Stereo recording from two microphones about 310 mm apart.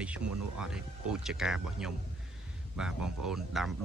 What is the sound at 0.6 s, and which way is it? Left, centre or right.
Speech, centre.